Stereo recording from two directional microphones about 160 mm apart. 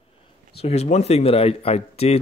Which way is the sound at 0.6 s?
40° left (ahead or behind).